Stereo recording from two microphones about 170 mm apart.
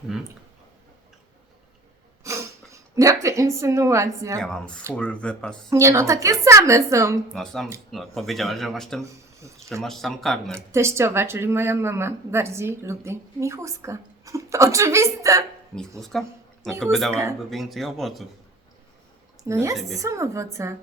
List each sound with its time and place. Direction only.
2.2 s a sound: 15° right (ahead or behind)
2.9 s speech: 20° right (ahead or behind)
4.4 s speech: 5° left (ahead or behind)
5.7 s speech: 20° right (ahead or behind)
7.3 s speech: centre (ahead or behind)
10.5 s speech: 15° right (ahead or behind)
16.0 s speech: centre (ahead or behind)
19.5 s speech: 15° right (ahead or behind)